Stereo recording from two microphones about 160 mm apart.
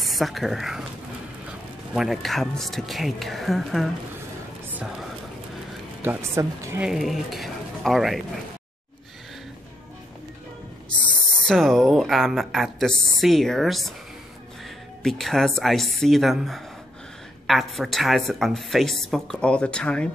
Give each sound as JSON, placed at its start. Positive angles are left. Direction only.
{"t": 0.0, "sound": "a woman's voice", "side_deg": 0}
{"t": 6.0, "sound": "a woman's voice", "side_deg": -15}
{"t": 6.8, "sound": "speech", "side_deg": 0}
{"t": 11.4, "sound": "a woman's voice", "side_deg": 0}
{"t": 15.0, "sound": "a woman's voice", "side_deg": 5}